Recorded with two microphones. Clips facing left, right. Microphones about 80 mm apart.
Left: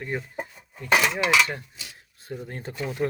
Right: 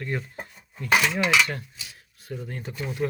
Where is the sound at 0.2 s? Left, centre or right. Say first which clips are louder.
Left 3 dB; centre.